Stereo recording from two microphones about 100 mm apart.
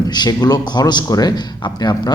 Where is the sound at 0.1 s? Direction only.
40° left (ahead or behind).